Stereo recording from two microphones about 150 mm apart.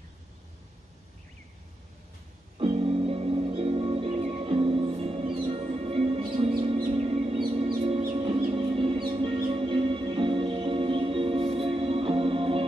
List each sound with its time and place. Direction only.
2.6 s music: 40° right (ahead or behind)